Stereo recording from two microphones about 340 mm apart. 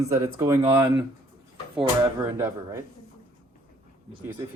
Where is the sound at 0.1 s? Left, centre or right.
Centre.